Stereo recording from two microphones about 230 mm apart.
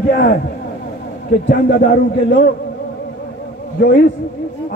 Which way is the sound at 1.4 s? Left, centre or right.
Left.